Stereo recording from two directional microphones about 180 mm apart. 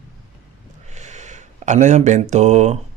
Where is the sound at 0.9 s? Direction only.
40° right (ahead or behind).